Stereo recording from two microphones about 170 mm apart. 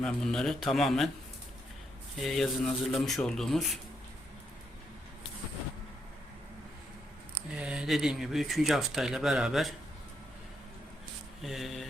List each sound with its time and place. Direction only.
0.0 s speech: 5° left (ahead or behind)
2.1 s speech: centre (ahead or behind)
7.5 s speech: 5° right (ahead or behind)
11.4 s speech: centre (ahead or behind)